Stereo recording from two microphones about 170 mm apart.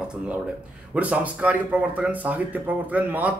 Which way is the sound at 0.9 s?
10° right (ahead or behind).